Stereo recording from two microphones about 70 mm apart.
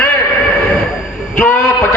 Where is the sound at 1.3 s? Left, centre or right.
Left.